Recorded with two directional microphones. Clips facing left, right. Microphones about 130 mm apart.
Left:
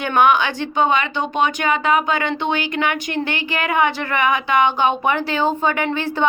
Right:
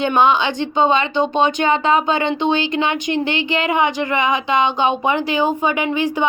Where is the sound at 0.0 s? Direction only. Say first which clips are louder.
Right 1 dB; 25° right (ahead or behind).